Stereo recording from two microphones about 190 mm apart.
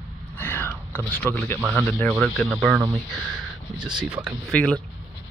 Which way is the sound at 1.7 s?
5° left (ahead or behind).